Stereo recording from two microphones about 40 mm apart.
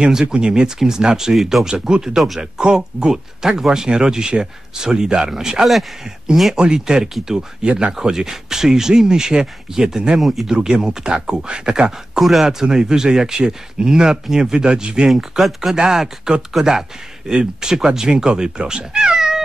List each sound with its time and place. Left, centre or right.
0.3 s speech: right; by 1.7 s centre
1.7 s speech: centre
2.1 s speech: centre
2.6 s speech: right
8.0 s speech: centre
10.2 s speech: centre
10.5 s speech: centre
12.2 s speech: centre
12.4 s speech: centre
15.0 s speech: centre
15.7 s speech: centre